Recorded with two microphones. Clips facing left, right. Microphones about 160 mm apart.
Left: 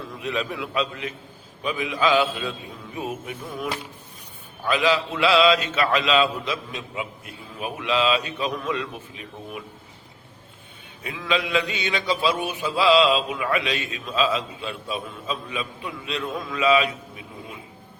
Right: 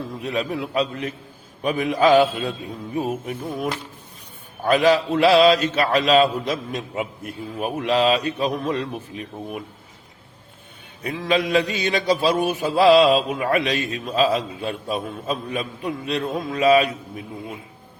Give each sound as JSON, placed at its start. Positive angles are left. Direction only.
{"t": 0.2, "sound": "a man's voice", "side_deg": -40}
{"t": 1.6, "sound": "mantra", "side_deg": -45}
{"t": 4.6, "sound": "mantra", "side_deg": -45}
{"t": 11.0, "sound": "mantra", "side_deg": -40}